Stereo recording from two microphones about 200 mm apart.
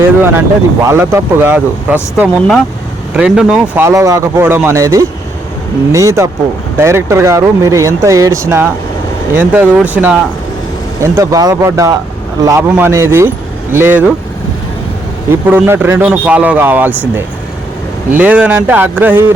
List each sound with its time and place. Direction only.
0.0 s a man's voice: 10° right (ahead or behind)
15.3 s a man's voice: 10° right (ahead or behind)